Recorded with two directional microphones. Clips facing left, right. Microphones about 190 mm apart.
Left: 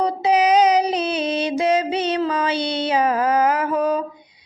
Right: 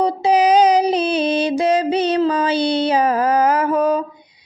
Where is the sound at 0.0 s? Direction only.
30° right (ahead or behind).